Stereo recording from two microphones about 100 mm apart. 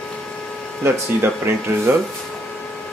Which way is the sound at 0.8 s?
25° right (ahead or behind).